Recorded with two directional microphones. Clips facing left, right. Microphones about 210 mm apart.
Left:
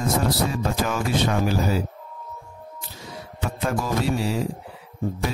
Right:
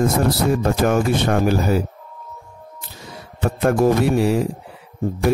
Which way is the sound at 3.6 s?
60° right (ahead or behind).